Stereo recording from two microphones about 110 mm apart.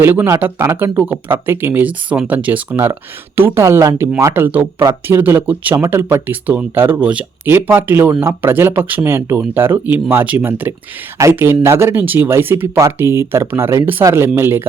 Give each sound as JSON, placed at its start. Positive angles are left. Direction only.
{"t": 0.0, "sound": "speech", "side_deg": -20}